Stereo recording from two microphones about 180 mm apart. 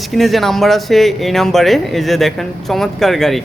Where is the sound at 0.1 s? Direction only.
Centre (ahead or behind).